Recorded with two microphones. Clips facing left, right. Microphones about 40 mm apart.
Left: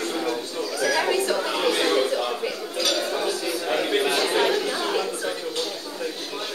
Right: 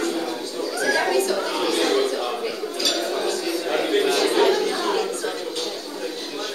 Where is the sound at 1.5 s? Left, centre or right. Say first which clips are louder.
Right 1 dB; centre.